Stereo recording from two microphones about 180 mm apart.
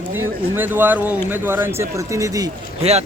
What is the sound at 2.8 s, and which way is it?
Speech, 35° right (ahead or behind).